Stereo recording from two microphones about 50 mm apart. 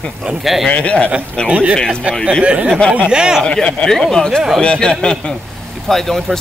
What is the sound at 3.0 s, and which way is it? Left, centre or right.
Speech, centre.